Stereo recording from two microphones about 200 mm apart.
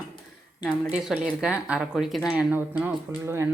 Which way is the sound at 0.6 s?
5° right (ahead or behind).